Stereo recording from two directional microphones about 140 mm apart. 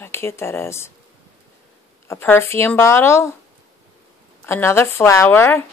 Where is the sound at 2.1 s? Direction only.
15° left (ahead or behind).